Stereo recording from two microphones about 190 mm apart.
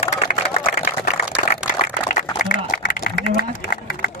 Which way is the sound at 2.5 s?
50° left (ahead or behind).